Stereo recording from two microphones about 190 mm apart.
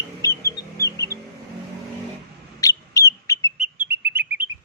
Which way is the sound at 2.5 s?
20° left (ahead or behind).